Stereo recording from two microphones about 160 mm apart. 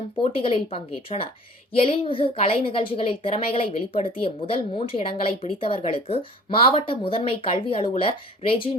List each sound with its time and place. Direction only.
0.2 s a woman's voice: 35° left (ahead or behind)